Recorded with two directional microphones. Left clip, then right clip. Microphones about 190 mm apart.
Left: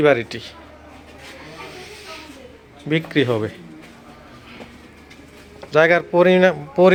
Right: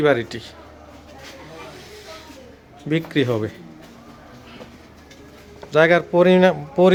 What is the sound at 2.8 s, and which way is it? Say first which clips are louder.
Speech: left 2 dB; 15° right (ahead or behind).